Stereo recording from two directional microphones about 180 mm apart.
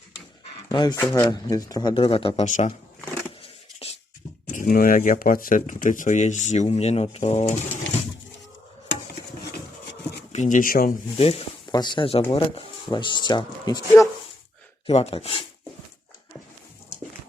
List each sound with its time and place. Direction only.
0.7 s speech: 25° left (ahead or behind)
0.9 s speech: 10° left (ahead or behind); by 2.7 s 40° left (ahead or behind)
3.8 s a sound: 35° left (ahead or behind)
4.5 s speech: 50° left (ahead or behind)
10.3 s speech: 45° left (ahead or behind)
11.2 s speech: 35° left (ahead or behind)
11.7 s speech: 25° left (ahead or behind)
14.8 s speech: 35° left (ahead or behind)